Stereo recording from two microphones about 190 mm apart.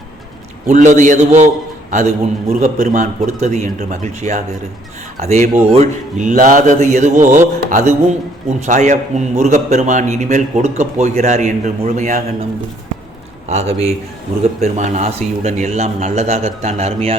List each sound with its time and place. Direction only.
0.7 s a man's voice: 40° right (ahead or behind)
13.5 s a man's voice: 35° right (ahead or behind)